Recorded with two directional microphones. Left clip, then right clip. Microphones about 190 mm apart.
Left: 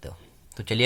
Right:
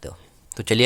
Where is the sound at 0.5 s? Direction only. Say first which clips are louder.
Right 7 dB; 35° right (ahead or behind).